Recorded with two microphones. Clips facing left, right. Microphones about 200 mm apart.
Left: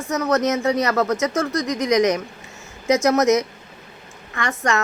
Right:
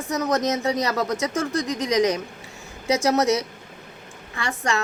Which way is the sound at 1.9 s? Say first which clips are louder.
Left 3 dB; 35° right (ahead or behind).